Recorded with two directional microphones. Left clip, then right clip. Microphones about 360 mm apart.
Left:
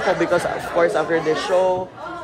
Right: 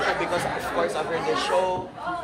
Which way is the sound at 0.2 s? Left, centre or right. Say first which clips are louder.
Left 6 dB; left.